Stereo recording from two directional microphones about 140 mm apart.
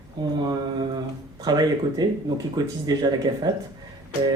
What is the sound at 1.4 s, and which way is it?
Speech, 30° right (ahead or behind).